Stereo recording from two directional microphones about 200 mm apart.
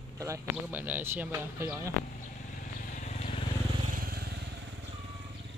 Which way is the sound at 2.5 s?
40° left (ahead or behind).